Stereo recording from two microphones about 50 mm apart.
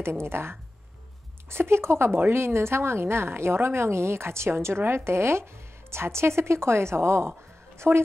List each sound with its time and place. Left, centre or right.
0.0 s a woman's voice: right